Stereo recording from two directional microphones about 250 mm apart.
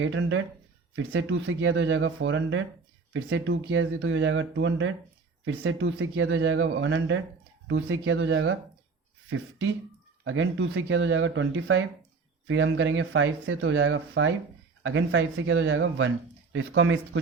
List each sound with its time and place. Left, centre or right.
0.0 s speech: right
10.2 s speech: right